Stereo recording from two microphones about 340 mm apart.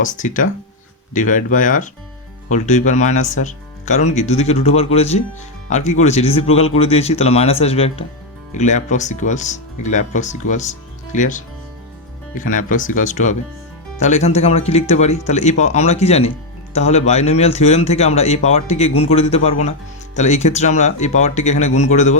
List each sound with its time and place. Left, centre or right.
0.0 s speech: left